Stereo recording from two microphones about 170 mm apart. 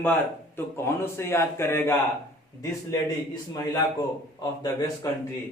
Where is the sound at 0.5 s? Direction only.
15° left (ahead or behind).